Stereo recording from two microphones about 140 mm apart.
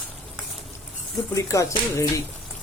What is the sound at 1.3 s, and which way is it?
Speech, 20° left (ahead or behind).